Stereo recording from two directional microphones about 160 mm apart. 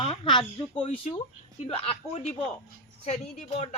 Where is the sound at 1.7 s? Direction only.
40° left (ahead or behind).